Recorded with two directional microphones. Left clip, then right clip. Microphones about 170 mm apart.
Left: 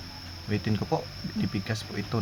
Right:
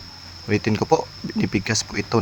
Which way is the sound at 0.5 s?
35° right (ahead or behind).